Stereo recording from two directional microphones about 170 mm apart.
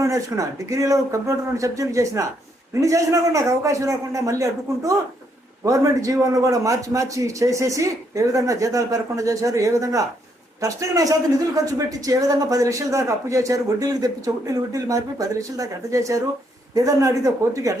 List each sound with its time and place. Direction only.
0.0 s a man's voice: 20° right (ahead or behind)